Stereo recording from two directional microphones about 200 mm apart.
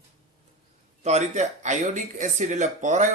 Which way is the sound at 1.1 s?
35° right (ahead or behind).